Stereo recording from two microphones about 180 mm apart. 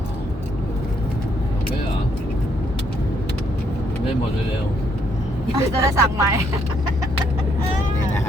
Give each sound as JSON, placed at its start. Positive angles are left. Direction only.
{"t": 5.5, "sound": "speech", "side_deg": -20}